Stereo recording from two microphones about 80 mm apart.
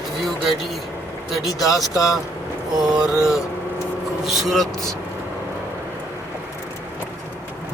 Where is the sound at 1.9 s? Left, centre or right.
Left.